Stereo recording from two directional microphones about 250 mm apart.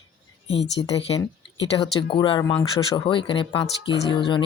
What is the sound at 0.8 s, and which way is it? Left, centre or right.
Speech, left.